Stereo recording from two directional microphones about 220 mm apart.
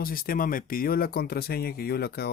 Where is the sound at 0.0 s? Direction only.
40° left (ahead or behind).